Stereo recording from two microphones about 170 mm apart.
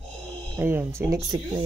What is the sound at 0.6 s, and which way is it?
Speech, 15° right (ahead or behind).